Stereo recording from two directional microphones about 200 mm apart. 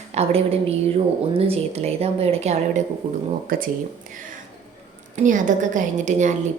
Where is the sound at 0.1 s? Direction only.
30° right (ahead or behind).